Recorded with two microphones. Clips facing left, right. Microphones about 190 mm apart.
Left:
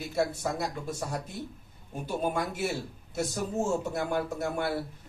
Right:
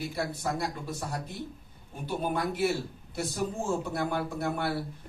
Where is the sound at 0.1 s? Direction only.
50° left (ahead or behind).